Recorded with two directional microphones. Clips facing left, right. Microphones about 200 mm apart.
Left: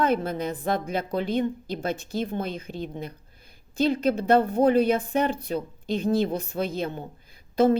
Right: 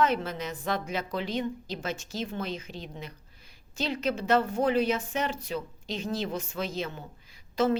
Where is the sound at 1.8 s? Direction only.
55° left (ahead or behind).